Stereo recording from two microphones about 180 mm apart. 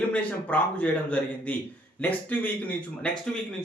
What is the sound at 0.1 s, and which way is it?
Speech, 5° left (ahead or behind).